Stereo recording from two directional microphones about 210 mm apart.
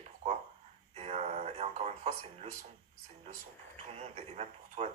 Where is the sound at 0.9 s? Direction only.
30° right (ahead or behind).